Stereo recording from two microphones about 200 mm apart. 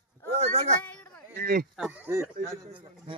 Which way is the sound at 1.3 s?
45° right (ahead or behind).